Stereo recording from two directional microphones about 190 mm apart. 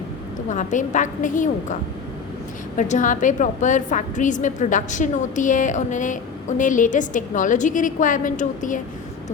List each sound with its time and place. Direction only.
0.5 s a woman's voice: 40° left (ahead or behind)